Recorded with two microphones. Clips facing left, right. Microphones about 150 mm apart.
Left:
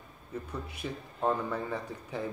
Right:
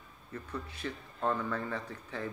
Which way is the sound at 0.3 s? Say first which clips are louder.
Left 2 dB; 10° left (ahead or behind).